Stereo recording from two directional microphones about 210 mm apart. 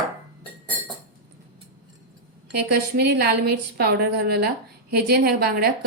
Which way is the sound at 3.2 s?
50° right (ahead or behind).